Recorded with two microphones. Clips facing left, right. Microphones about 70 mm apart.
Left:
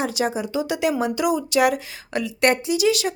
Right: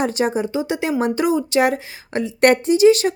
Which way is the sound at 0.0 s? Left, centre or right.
Right.